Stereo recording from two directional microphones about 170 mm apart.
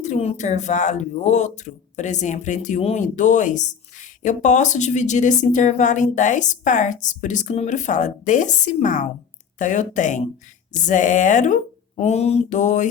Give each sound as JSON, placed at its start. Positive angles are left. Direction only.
{"t": 0.0, "sound": "speech", "side_deg": 40}